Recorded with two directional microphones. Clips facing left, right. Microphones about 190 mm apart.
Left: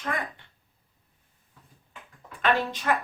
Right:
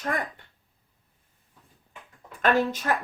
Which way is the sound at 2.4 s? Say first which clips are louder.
Right 3 dB; 45° right (ahead or behind).